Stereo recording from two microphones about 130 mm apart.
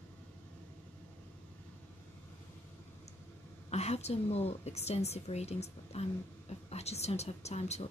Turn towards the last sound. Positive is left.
turn(degrees=55)  # may be behind; listen again after turning